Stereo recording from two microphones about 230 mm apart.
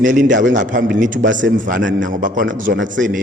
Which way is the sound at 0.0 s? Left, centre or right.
Right.